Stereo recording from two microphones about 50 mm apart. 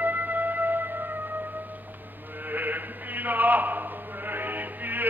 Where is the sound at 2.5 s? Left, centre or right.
Right.